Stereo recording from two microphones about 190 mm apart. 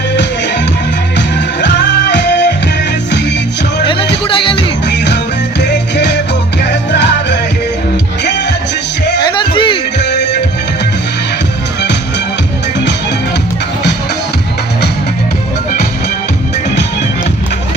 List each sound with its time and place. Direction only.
1.6 s music: 65° left (ahead or behind)
4.3 s music: 25° left (ahead or behind)
4.9 s music: 65° left (ahead or behind)
9.2 s music: 25° left (ahead or behind)
10.0 s music: 65° left (ahead or behind)